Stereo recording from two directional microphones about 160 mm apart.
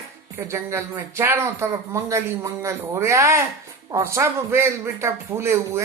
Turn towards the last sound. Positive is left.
turn(degrees=-15)  # may be behind; listen again after turning